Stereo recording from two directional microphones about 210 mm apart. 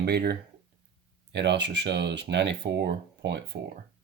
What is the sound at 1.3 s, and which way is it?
Speech, 55° right (ahead or behind).